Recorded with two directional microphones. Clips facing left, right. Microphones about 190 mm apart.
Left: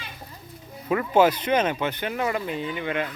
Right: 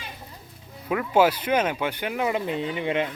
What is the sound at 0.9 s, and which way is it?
Speech, 5° right (ahead or behind).